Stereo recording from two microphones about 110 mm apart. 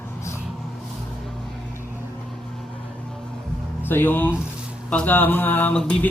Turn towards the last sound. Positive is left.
turn(degrees=10)  # may be behind; listen again after turning